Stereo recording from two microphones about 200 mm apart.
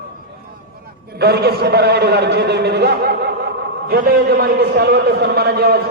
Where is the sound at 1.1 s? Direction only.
55° right (ahead or behind).